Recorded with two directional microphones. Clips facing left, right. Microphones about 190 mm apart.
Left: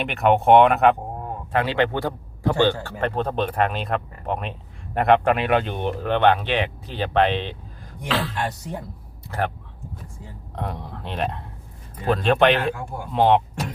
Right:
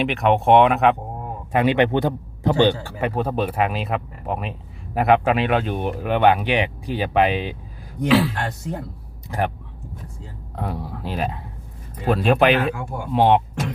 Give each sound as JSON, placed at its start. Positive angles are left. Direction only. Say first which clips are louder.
{"t": 0.0, "sound": "speech", "louder": "even", "side_deg": 0}
{"t": 1.5, "sound": "a man's voice", "louder": "right 4 dB", "side_deg": -15}
{"t": 10.5, "sound": "speech", "louder": "right 2 dB", "side_deg": -5}